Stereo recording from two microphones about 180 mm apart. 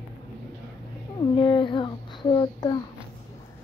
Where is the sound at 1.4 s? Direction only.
25° left (ahead or behind).